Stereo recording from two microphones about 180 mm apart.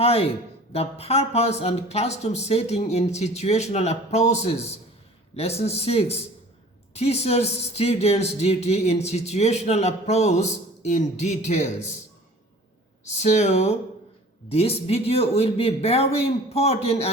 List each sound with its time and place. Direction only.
0.0 s speech: 35° left (ahead or behind)
13.1 s speech: 40° left (ahead or behind)